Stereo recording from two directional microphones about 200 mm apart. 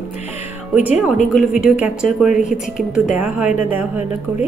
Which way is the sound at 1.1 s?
40° left (ahead or behind).